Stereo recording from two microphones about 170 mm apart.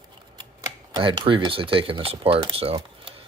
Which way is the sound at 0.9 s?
25° right (ahead or behind).